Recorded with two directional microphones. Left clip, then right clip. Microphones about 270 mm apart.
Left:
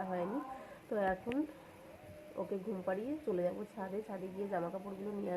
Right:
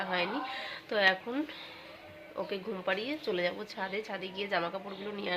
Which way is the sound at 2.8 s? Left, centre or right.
Centre.